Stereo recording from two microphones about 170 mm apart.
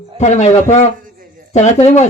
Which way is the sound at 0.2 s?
40° left (ahead or behind).